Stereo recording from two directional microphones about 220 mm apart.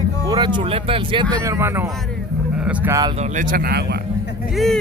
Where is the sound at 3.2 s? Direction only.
40° right (ahead or behind).